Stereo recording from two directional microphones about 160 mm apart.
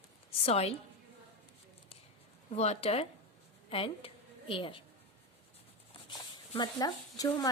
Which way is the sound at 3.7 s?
35° left (ahead or behind).